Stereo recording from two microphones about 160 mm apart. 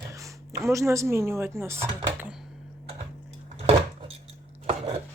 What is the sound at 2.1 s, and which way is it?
Computer keyboard, 10° right (ahead or behind).